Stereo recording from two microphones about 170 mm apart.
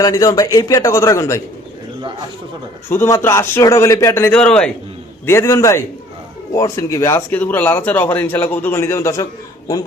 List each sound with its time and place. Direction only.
0.0 s speech: 20° left (ahead or behind)
2.9 s speech: 15° left (ahead or behind)